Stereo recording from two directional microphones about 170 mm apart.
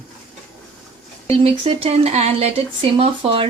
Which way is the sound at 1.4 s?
35° right (ahead or behind).